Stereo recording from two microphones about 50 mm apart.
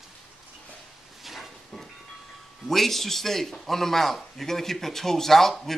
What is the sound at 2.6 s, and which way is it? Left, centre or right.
A man's voice, centre.